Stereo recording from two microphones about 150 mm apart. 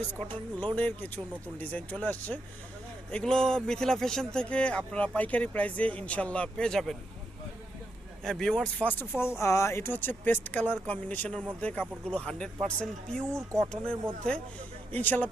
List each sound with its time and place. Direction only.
0.1 s speech: 10° left (ahead or behind)
8.2 s speech: 5° left (ahead or behind)
13.3 s speech: 20° right (ahead or behind)
14.3 s speech: 5° left (ahead or behind)